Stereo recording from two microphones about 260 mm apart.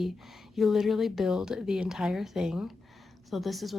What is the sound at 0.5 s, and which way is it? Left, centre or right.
Speech, centre.